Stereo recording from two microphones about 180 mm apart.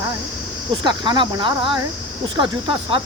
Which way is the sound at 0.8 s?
25° right (ahead or behind).